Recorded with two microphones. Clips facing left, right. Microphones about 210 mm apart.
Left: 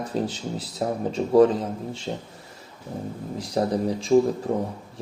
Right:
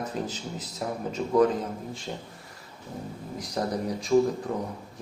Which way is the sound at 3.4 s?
30° left (ahead or behind).